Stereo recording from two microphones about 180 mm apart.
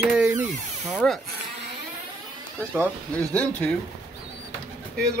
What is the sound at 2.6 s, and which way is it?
Speech, 5° left (ahead or behind).